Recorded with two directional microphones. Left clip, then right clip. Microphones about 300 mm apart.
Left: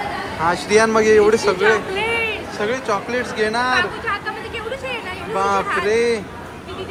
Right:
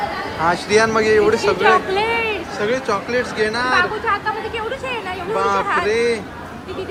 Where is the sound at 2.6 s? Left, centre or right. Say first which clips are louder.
Right 1 dB; centre.